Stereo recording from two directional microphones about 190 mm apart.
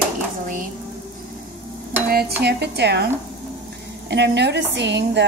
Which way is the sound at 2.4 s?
60° right (ahead or behind).